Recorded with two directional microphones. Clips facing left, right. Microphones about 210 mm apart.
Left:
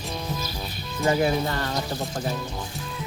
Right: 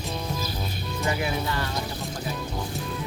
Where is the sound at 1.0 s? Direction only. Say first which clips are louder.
Left 6 dB; 40° left (ahead or behind).